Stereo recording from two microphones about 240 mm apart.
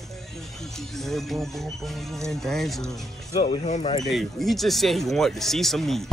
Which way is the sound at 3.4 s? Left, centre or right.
Left.